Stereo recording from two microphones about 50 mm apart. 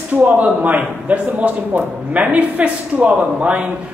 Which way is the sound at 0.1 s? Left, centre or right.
Right.